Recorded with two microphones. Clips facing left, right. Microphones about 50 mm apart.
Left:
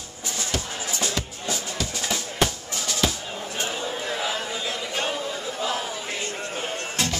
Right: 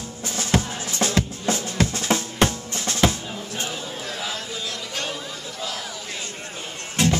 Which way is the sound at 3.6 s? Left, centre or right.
Centre.